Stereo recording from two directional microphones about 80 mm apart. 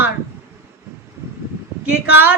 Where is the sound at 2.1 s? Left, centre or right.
Right.